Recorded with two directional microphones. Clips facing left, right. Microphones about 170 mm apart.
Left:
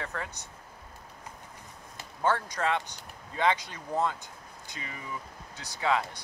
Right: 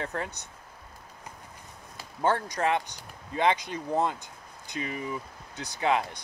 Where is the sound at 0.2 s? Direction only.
20° right (ahead or behind).